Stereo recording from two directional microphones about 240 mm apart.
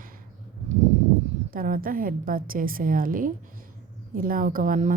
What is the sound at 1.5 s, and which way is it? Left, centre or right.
Speech, right.